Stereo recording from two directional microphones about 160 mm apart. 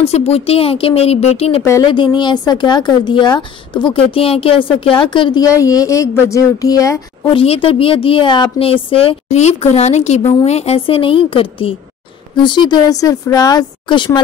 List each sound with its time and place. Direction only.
0.0 s a woman's voice: 40° left (ahead or behind)
1.9 s speech: 30° left (ahead or behind)
7.3 s a woman's voice: 35° left (ahead or behind)